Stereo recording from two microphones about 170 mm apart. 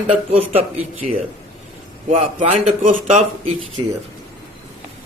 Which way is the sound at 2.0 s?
40° right (ahead or behind).